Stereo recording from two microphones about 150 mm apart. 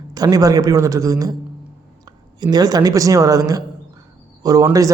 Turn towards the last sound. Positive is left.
turn(degrees=-25)  # may be behind; listen again after turning